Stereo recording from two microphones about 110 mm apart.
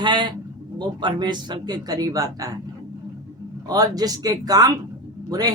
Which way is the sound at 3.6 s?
35° right (ahead or behind).